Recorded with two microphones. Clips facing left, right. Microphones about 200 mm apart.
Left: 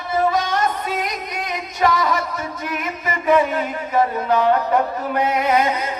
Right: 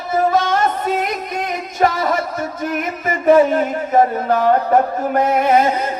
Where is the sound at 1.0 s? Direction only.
50° right (ahead or behind).